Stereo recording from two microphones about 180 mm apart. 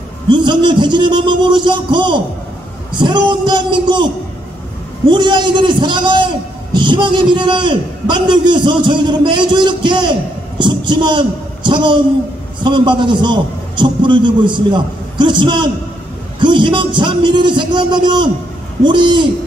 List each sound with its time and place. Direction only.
0.3 s a man's voice: 25° right (ahead or behind)
5.1 s a man's voice: 25° right (ahead or behind)